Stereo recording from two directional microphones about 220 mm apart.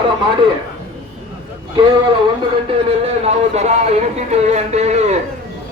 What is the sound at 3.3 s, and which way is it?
Speech, 30° right (ahead or behind).